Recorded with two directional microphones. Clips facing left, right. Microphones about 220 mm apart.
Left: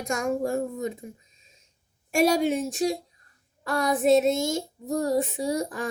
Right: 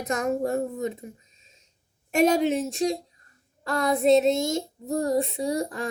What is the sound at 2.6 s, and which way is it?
Speech, centre (ahead or behind).